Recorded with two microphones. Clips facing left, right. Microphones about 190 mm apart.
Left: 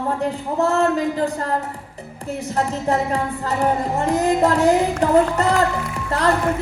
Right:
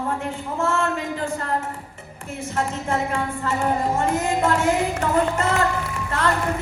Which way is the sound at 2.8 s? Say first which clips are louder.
Left 4 dB; 35° left (ahead or behind).